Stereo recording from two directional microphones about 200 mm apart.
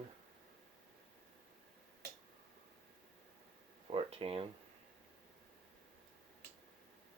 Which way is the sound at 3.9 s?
30° right (ahead or behind).